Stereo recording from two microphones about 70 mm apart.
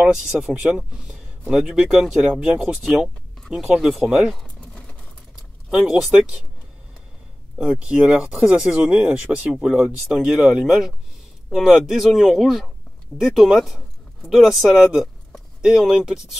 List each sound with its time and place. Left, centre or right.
0.0 s speech: centre
4.6 s a sound: centre
5.7 s speech: centre
7.6 s speech: centre